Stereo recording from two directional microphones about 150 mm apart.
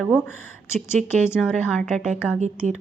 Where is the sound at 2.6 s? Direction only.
50° right (ahead or behind).